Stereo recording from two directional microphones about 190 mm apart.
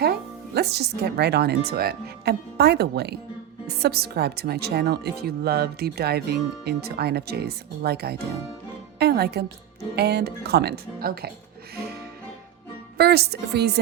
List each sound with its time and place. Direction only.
0.0 s speech: 55° right (ahead or behind)
13.0 s speech: 55° right (ahead or behind)